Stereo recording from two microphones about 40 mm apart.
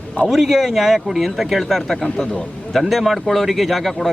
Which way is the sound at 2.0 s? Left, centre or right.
Centre.